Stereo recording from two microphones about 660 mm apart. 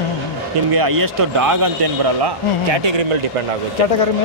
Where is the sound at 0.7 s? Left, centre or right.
Right.